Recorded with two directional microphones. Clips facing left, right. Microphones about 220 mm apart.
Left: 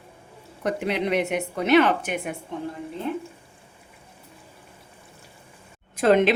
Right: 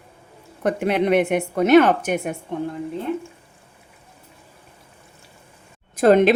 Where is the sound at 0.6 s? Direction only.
55° right (ahead or behind).